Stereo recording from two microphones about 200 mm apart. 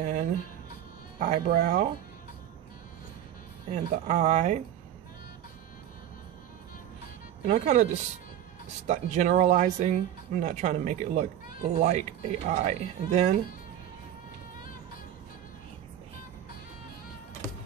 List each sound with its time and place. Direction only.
0.0 s music: 35° right (ahead or behind)
1.2 s speech: 50° right (ahead or behind)
3.7 s speech: 35° right (ahead or behind)
7.4 s speech: 35° right (ahead or behind)